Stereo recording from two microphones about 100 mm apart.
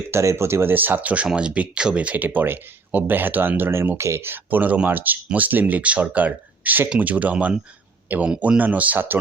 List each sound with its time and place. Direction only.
0.1 s speech: 30° right (ahead or behind)